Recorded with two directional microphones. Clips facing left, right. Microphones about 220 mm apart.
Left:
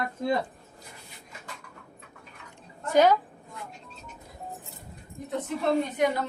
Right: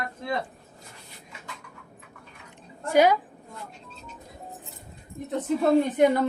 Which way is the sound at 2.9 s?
10° right (ahead or behind).